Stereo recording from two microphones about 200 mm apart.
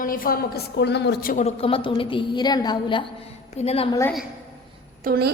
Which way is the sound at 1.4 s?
30° left (ahead or behind).